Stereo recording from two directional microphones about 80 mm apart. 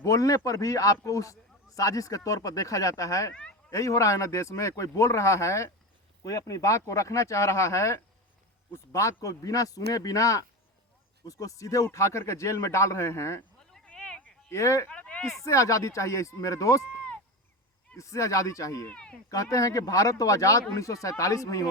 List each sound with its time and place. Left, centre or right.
0.0 s speech: left
13.8 s a sound: centre
14.5 s speech: left
14.8 s a sound: centre
15.4 s speech: left
17.9 s speech: left
18.9 s speech: centre
19.3 s speech: left